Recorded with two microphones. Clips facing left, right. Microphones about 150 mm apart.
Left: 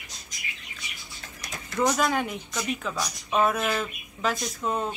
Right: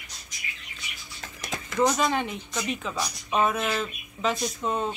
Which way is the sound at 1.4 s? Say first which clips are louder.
Right 4 dB; 90° right.